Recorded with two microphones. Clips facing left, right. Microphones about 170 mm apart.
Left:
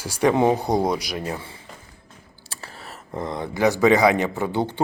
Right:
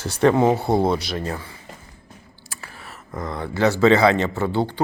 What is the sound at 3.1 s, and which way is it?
Speech, 20° left (ahead or behind).